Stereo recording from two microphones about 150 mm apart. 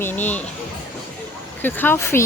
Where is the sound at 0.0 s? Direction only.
10° left (ahead or behind).